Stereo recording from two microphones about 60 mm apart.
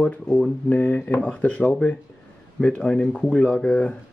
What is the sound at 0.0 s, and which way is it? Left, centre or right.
Speech, centre.